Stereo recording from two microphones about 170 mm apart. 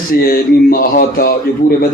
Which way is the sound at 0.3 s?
60° left (ahead or behind).